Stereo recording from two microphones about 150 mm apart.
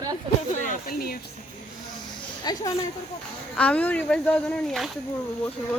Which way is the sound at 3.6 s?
10° left (ahead or behind).